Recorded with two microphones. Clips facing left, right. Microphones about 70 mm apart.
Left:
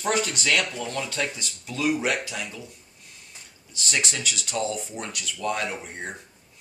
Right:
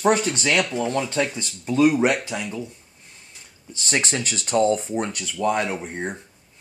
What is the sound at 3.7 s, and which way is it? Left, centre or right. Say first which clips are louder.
Speech: right 4 dB; right.